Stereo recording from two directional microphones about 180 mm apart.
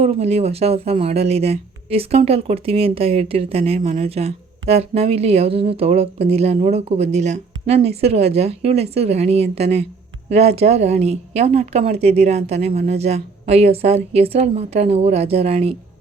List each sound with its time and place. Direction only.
0.0 s speech: 35° right (ahead or behind)